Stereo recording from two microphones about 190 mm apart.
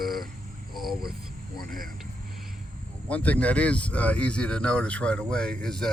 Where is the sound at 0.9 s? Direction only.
55° right (ahead or behind).